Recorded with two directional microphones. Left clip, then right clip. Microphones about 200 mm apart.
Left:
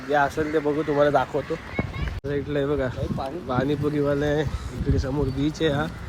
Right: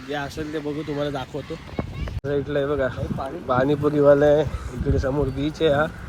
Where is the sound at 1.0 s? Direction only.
Centre (ahead or behind).